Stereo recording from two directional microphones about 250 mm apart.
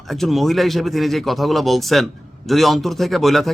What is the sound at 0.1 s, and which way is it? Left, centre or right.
Speech, centre.